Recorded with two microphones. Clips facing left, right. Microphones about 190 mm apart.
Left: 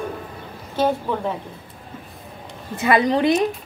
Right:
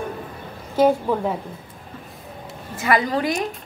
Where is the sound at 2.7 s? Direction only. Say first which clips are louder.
Left 3 dB; 20° left (ahead or behind).